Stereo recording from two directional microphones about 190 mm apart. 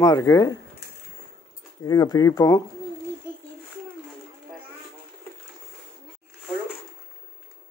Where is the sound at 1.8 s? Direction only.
20° left (ahead or behind).